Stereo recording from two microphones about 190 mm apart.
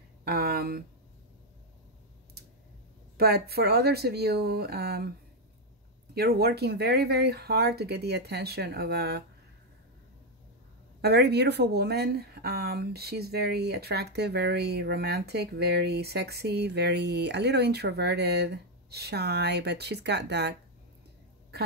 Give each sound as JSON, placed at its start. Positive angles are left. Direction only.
{"t": 0.2, "sound": "a sound", "side_deg": -55}
{"t": 3.2, "sound": "a woman's voice", "side_deg": -55}
{"t": 6.1, "sound": "a woman's voice", "side_deg": -55}
{"t": 11.0, "sound": "a woman's voice", "side_deg": -60}